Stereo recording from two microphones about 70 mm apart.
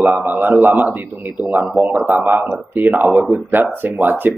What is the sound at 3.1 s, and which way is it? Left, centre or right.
Speech, centre.